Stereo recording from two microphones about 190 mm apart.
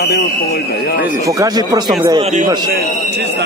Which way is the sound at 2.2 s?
40° right (ahead or behind).